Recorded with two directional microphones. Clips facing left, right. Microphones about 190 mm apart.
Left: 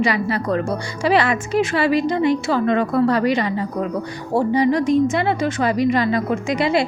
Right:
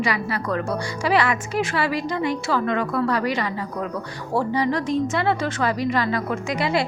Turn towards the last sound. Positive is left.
turn(degrees=20)  # may be behind; listen again after turning